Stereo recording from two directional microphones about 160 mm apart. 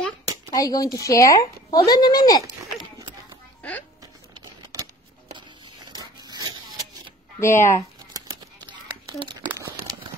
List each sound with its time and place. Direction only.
0.5 s a woman's voice: 25° left (ahead or behind)
5.9 s a sound: 25° right (ahead or behind)
7.3 s speech: 15° left (ahead or behind)
9.2 s crumpling: 35° right (ahead or behind)